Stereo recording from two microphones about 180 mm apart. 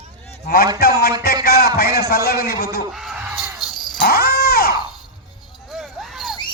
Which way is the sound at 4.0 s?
60° left (ahead or behind).